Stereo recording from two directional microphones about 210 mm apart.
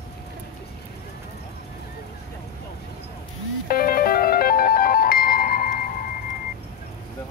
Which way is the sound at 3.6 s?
45° left (ahead or behind).